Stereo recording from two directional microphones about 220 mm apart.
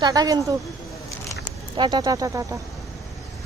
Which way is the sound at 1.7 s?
20° right (ahead or behind).